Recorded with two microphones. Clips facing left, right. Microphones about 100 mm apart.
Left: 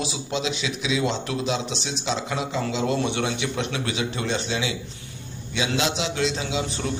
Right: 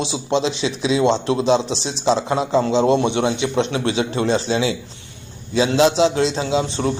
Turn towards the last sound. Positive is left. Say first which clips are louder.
# right 7 dB
turn(degrees=-30)  # may be behind; listen again after turning